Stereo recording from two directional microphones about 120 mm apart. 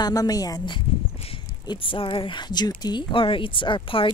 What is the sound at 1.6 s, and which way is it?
Speech, 45° left (ahead or behind).